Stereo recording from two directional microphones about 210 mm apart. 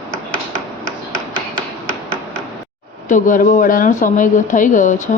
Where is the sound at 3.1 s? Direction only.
40° left (ahead or behind).